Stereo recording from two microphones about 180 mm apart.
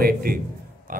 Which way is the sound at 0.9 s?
50° right (ahead or behind).